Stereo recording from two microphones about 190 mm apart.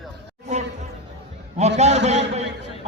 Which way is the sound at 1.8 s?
35° right (ahead or behind).